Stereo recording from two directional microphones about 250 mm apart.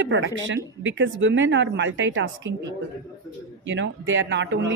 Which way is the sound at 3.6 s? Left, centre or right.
Right.